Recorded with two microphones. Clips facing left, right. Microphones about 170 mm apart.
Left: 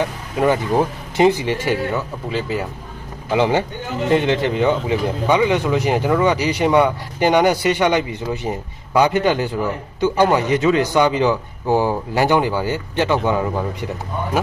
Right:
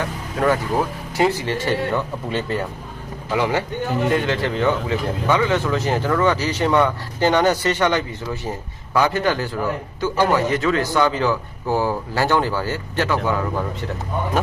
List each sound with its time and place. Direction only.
0.3 s speech: 20° left (ahead or behind)
1.9 s speech: 5° left (ahead or behind)
3.3 s speech: 25° left (ahead or behind)